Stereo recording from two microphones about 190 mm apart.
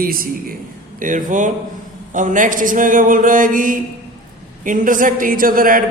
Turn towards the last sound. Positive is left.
turn(degrees=-45)  # may be behind; listen again after turning